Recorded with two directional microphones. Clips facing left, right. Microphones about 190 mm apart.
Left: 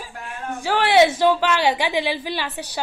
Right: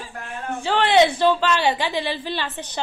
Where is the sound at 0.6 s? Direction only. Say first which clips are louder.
Left 1 dB; 15° left (ahead or behind).